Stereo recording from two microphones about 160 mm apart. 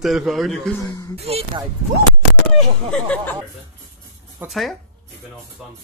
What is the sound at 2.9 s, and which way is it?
Speech, 5° left (ahead or behind).